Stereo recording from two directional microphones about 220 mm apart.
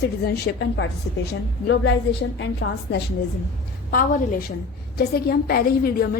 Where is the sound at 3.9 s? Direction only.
40° left (ahead or behind).